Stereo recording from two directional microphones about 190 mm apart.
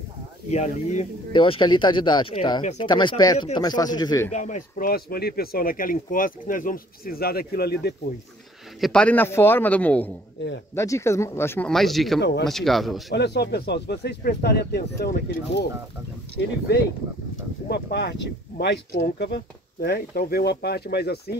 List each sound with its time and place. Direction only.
0.5 s speech: 40° left (ahead or behind)
1.3 s speech: 25° left (ahead or behind)
4.3 s speech: 40° left (ahead or behind); by 7.9 s 55° left (ahead or behind)
8.8 s a man's voice: 5° left (ahead or behind)
11.7 s speech: centre (ahead or behind)
12.2 s speech: 60° left (ahead or behind)
12.4 s speech: centre (ahead or behind)
13.1 s speech: 60° left (ahead or behind)